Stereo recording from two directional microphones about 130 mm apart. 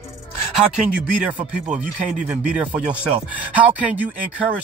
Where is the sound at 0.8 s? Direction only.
10° right (ahead or behind).